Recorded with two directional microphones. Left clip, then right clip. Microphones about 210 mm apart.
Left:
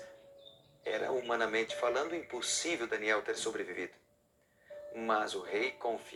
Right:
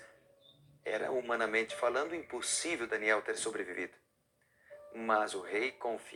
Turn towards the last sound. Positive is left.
turn(degrees=-15)  # may be behind; listen again after turning